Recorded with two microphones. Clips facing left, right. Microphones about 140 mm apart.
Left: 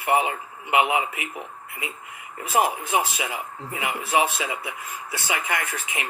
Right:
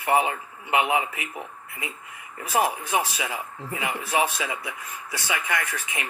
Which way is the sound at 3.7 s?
35° right (ahead or behind).